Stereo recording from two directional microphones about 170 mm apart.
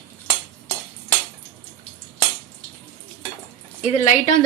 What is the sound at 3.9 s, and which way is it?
Speech, 45° left (ahead or behind).